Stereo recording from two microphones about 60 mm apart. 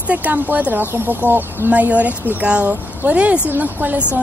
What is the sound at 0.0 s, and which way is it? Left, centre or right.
Speech, right.